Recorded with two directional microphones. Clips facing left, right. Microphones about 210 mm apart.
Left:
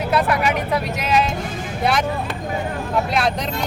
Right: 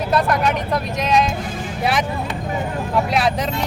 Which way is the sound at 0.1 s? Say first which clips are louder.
Right 1 dB; 5° left (ahead or behind).